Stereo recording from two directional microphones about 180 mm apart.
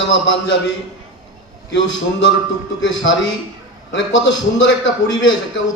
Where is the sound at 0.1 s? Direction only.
90° left.